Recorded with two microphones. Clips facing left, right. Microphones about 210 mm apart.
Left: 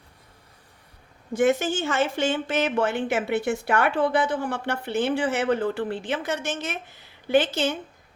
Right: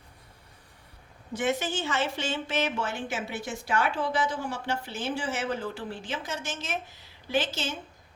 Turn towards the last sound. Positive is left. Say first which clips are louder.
# left 8 dB
turn(degrees=60)  # may be behind; listen again after turning